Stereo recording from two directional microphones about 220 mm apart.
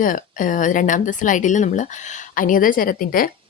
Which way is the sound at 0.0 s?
40° left (ahead or behind).